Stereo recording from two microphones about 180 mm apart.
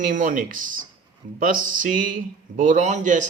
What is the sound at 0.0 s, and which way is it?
Speech, 45° right (ahead or behind).